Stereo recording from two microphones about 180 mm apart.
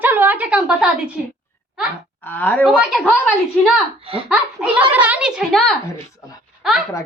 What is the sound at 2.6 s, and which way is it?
A woman's voice, 5° right (ahead or behind).